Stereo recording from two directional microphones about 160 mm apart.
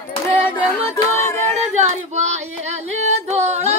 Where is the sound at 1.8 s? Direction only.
45° right (ahead or behind).